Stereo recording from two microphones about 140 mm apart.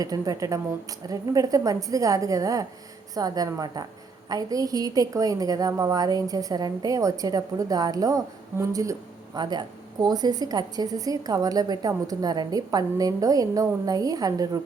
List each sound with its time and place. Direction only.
0.0 s a woman's voice: 25° right (ahead or behind)